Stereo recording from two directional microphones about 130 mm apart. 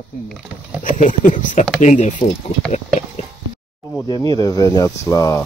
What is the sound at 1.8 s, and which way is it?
Speech, 65° left (ahead or behind).